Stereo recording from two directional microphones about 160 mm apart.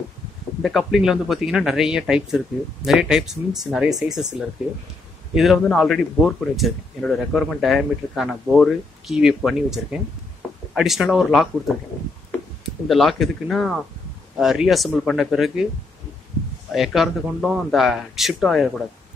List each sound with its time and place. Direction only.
0.6 s speech: centre (ahead or behind)
12.8 s speech: centre (ahead or behind)
16.7 s speech: centre (ahead or behind)